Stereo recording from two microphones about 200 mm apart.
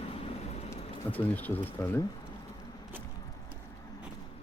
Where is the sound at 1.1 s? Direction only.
10° left (ahead or behind).